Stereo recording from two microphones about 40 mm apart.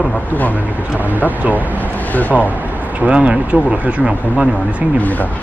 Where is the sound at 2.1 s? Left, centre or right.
Left.